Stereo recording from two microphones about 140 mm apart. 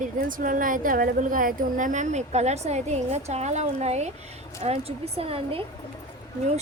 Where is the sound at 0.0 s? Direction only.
75° right (ahead or behind); by 5.6 s 40° right (ahead or behind).